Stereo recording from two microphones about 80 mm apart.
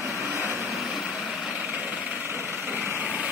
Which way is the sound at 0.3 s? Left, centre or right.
Right.